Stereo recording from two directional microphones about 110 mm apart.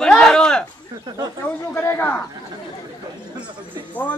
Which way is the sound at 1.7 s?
20° left (ahead or behind).